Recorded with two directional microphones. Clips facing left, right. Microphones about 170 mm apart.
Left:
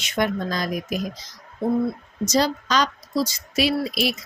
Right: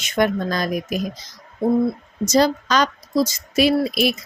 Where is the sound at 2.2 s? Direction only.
50° right (ahead or behind).